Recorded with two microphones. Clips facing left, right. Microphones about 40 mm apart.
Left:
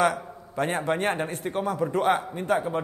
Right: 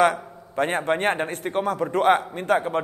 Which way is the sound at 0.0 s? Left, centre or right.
Right.